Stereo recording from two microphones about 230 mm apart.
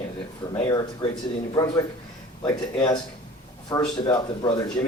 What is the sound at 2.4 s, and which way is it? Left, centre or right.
Speech, centre.